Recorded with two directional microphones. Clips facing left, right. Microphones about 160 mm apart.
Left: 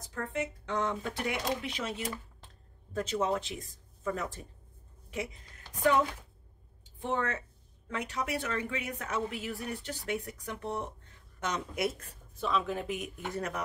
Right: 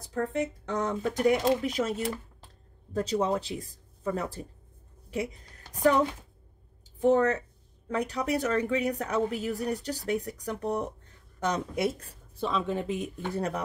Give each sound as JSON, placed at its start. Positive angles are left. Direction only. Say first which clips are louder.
{"t": 0.0, "sound": "speech", "louder": "right 6 dB", "side_deg": -35}
{"t": 6.8, "sound": "speech", "louder": "right 10 dB", "side_deg": -40}